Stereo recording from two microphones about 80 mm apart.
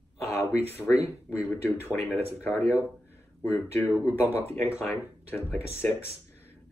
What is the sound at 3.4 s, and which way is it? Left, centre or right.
Speech, left.